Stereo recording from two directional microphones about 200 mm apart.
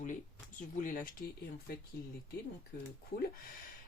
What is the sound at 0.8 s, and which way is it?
Speech, 40° left (ahead or behind).